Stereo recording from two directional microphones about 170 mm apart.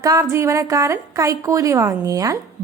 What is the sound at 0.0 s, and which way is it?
A woman's voice, 20° right (ahead or behind).